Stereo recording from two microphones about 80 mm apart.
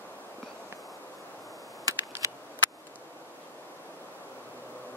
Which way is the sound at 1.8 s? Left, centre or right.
Right.